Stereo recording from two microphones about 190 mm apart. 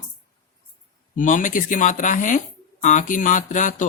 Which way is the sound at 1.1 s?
45° left (ahead or behind).